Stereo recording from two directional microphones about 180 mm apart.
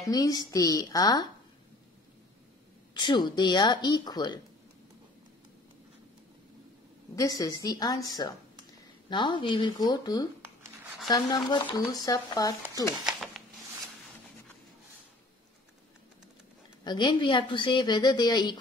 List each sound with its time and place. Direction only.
0.0 s a woman's voice: 20° left (ahead or behind)
2.9 s a woman's voice: 25° left (ahead or behind)
7.2 s a woman's voice: 20° left (ahead or behind)
13.0 s a sound: centre (ahead or behind)
16.8 s a woman's voice: 25° left (ahead or behind)